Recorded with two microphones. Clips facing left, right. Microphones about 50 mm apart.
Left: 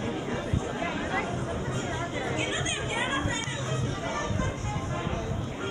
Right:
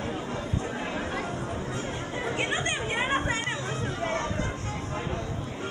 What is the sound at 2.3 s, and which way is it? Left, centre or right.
Chatter, right.